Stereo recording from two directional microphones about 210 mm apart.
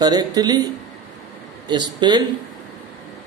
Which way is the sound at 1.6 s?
20° right (ahead or behind).